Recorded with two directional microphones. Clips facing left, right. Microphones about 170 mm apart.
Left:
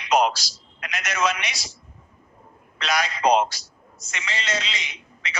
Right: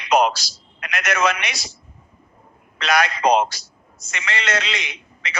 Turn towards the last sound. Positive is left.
turn(degrees=-60)  # may be behind; listen again after turning